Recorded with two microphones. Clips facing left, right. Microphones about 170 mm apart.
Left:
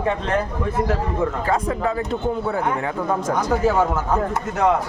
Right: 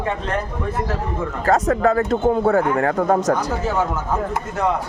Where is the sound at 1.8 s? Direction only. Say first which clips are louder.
Right 6 dB; 50° right (ahead or behind).